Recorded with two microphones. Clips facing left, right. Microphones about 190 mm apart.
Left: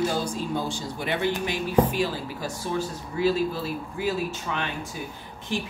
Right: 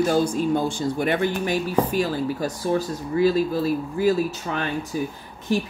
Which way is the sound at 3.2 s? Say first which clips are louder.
Right 4 dB; 40° right (ahead or behind).